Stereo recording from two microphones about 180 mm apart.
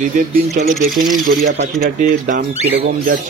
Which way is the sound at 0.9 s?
Centre (ahead or behind).